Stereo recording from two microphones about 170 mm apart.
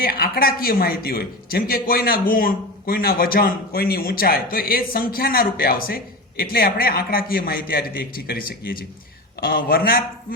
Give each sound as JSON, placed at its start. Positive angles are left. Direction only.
{"t": 0.0, "sound": "a man's voice", "side_deg": 60}